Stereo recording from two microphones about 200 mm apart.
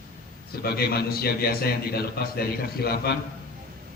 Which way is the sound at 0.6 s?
50° left (ahead or behind).